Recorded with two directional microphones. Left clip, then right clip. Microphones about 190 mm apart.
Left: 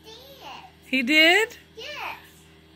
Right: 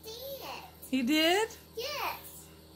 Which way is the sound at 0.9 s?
15° left (ahead or behind).